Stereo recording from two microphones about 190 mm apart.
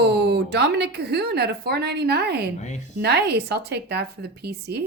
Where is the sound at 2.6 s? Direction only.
40° left (ahead or behind).